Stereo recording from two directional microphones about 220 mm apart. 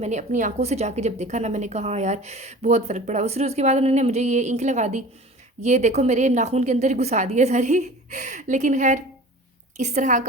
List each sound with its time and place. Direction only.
0.0 s a woman's voice: 35° right (ahead or behind)